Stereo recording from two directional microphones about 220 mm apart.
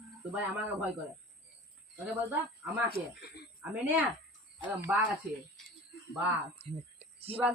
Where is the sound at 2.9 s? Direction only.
45° left (ahead or behind).